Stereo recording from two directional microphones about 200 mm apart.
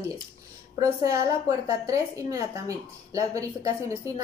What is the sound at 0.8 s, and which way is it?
A woman's voice, 15° right (ahead or behind).